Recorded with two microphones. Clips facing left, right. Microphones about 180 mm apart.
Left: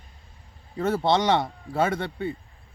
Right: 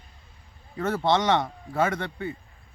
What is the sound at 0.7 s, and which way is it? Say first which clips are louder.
Speech: left 1 dB; 25° left (ahead or behind).